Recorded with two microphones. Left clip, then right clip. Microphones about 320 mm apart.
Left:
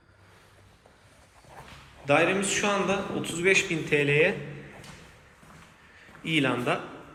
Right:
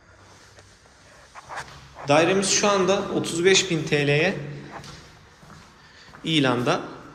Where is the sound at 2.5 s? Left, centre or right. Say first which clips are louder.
Right 6 dB; centre.